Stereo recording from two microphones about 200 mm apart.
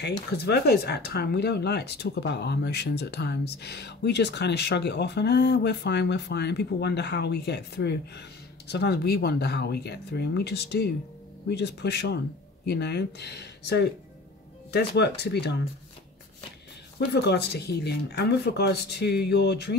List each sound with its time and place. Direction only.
0.0 s speech: 55° left (ahead or behind)
17.1 s speech: 55° left (ahead or behind)